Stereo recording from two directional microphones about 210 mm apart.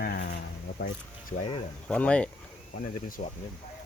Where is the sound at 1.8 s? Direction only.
5° left (ahead or behind).